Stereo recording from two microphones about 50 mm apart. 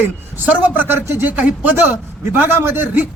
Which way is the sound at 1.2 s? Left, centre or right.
Right.